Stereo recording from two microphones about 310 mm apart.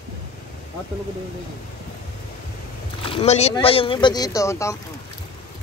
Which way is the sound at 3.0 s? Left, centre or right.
Centre.